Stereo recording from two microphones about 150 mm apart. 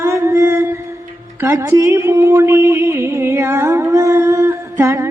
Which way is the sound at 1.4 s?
15° right (ahead or behind).